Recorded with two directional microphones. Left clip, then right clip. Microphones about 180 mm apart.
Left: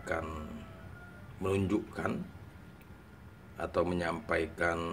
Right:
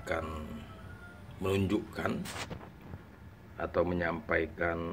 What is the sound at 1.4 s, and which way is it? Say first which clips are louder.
Owl: even; 5° left (ahead or behind).